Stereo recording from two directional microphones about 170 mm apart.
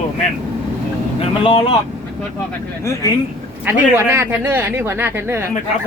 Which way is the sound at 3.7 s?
15° right (ahead or behind).